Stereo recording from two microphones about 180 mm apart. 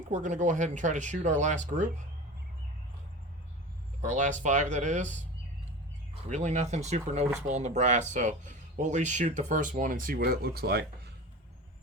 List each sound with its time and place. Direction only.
0.1 s speech: 45° right (ahead or behind)
4.0 s speech: 40° right (ahead or behind)
6.3 s speech: 40° right (ahead or behind); by 11.1 s 65° right (ahead or behind)